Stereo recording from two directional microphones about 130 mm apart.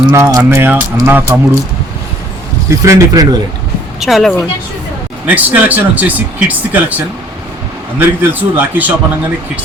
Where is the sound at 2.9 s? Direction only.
25° right (ahead or behind).